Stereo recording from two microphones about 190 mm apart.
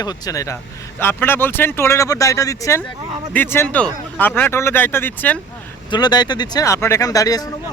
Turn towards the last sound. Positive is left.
turn(degrees=20)  # may be behind; listen again after turning